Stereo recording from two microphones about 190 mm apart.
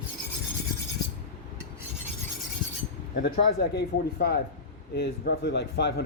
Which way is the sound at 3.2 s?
55° left (ahead or behind).